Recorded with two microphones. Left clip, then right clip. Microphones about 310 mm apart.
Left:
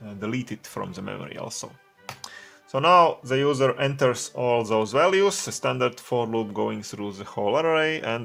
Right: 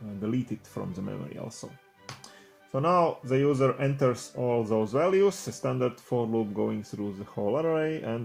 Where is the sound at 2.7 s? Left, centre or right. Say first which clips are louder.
Left 7 dB; left.